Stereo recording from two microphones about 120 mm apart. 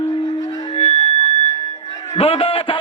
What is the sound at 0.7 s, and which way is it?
Music, 55° left (ahead or behind).